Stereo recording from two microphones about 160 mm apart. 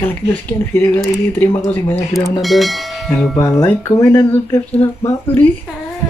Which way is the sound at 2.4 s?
Centre (ahead or behind).